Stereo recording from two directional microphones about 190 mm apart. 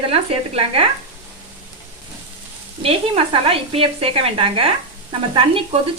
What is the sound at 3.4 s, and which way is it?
A woman's voice, 30° right (ahead or behind).